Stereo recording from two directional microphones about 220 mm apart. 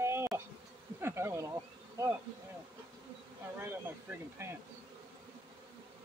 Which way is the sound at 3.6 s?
10° right (ahead or behind).